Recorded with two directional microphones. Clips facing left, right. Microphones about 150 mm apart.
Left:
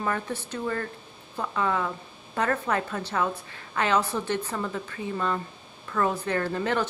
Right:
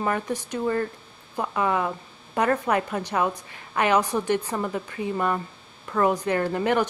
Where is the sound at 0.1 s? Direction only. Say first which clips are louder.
Right 3 dB; 15° right (ahead or behind).